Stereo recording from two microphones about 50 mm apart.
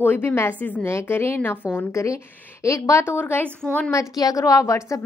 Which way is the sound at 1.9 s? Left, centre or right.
Left.